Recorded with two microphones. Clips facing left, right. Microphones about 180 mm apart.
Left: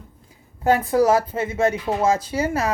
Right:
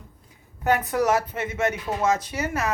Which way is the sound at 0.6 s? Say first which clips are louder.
Left 5 dB; 30° left (ahead or behind).